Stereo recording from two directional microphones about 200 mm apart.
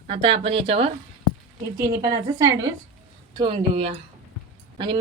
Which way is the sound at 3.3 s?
25° right (ahead or behind).